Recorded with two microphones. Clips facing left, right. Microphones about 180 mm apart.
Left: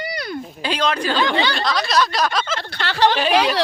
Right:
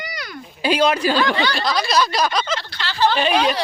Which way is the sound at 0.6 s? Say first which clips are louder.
Right 5 dB; 10° right (ahead or behind).